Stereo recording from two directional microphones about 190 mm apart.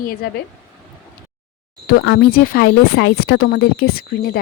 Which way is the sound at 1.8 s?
65° left (ahead or behind).